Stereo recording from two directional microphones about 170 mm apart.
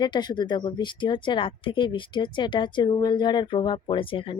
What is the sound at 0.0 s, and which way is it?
A woman's voice, 25° left (ahead or behind).